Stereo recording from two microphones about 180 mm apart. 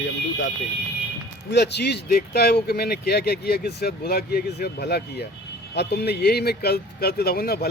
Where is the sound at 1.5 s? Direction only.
70° left (ahead or behind).